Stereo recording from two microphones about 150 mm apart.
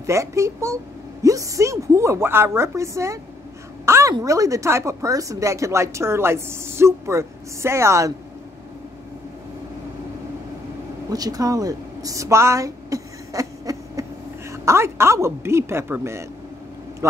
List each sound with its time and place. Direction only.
0.0 s a woman's voice: 20° right (ahead or behind)
11.1 s a woman's voice: 25° right (ahead or behind)